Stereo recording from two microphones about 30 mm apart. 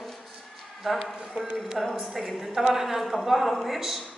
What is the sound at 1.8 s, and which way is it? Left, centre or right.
A man's voice, centre.